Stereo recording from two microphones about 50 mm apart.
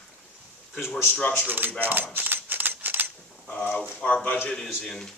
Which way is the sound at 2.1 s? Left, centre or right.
Right.